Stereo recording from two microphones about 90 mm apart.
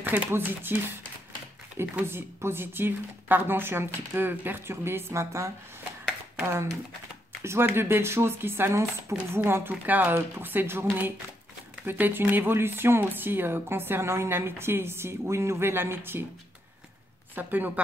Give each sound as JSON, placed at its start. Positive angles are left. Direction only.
{"t": 0.0, "sound": "speech", "side_deg": -20}
{"t": 17.4, "sound": "speech", "side_deg": -20}